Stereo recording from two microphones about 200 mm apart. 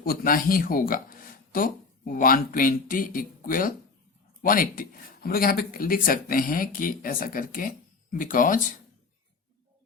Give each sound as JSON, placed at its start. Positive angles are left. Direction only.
{"t": 0.0, "sound": "speech", "side_deg": 45}